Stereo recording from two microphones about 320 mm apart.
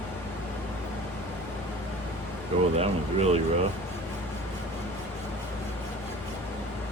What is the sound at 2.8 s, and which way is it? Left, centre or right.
Speech, centre.